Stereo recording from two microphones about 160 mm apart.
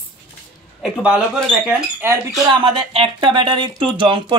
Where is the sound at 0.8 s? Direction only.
5° right (ahead or behind).